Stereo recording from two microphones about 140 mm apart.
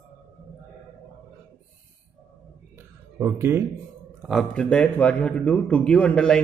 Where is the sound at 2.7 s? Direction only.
15° right (ahead or behind).